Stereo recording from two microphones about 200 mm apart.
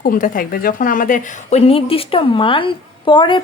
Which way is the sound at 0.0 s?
45° left (ahead or behind).